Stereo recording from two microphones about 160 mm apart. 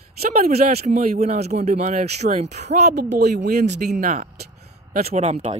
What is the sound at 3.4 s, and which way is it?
Speech, 55° right (ahead or behind).